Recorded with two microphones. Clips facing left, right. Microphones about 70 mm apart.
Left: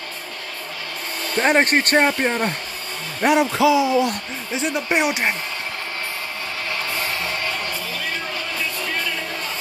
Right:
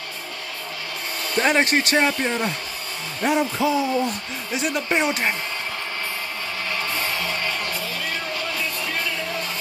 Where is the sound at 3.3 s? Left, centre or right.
Left.